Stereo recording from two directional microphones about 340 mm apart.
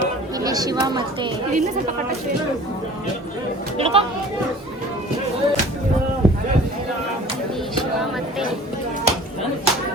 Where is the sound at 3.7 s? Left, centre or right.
Centre.